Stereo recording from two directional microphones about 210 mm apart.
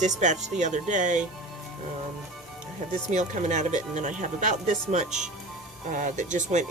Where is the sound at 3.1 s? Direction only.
35° right (ahead or behind).